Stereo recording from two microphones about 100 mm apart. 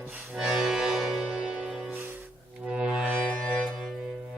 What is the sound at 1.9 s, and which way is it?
Music, 20° right (ahead or behind).